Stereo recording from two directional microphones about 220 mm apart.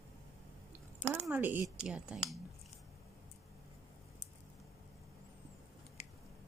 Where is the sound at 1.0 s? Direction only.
5° left (ahead or behind).